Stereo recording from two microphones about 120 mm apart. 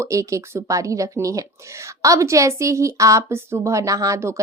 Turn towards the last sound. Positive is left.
turn(degrees=-25)  # may be behind; listen again after turning